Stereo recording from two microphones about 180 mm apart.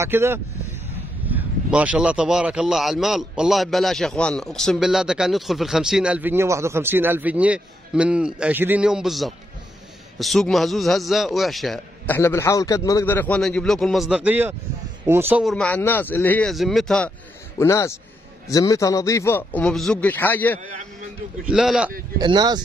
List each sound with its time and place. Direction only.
0.0 s a man's voice: 15° right (ahead or behind)
12.1 s a man's voice: 15° left (ahead or behind); by 15.4 s 10° right (ahead or behind)
15.4 s a man's voice: 5° left (ahead or behind)
17.6 s a man's voice: 15° left (ahead or behind)
21.5 s a man's voice: 5° right (ahead or behind)
22.2 s speech: 25° right (ahead or behind)